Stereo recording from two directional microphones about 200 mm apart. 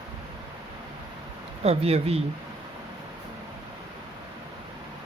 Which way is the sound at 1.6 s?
30° right (ahead or behind).